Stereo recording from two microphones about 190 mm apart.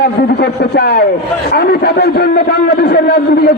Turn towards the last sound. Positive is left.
turn(degrees=55)  # may be behind; listen again after turning